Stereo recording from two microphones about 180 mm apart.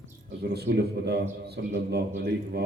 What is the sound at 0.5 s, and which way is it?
A man's voice, 65° right (ahead or behind).